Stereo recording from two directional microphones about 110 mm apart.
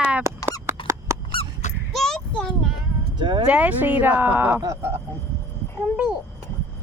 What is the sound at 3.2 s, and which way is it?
Speech, 45° right (ahead or behind).